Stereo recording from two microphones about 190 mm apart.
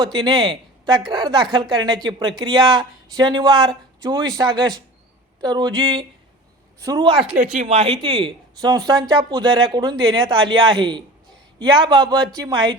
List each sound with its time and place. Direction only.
0.0 s speech: 20° right (ahead or behind)
7.5 s speech: 35° right (ahead or behind)